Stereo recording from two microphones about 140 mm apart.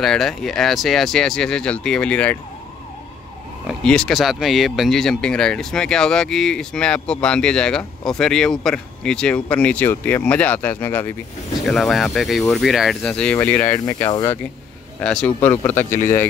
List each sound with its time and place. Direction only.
0.0 s speech: 5° left (ahead or behind)
3.6 s speech: 5° left (ahead or behind)
11.6 s speech: centre (ahead or behind)
14.1 s speech: 25° left (ahead or behind)
15.0 s speech: 10° left (ahead or behind)